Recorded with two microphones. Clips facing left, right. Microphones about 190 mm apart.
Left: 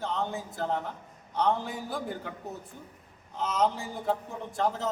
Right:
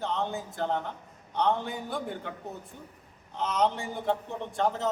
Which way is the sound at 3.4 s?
Centre (ahead or behind).